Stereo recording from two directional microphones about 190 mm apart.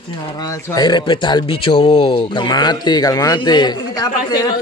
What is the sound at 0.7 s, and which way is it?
Speech, 20° left (ahead or behind).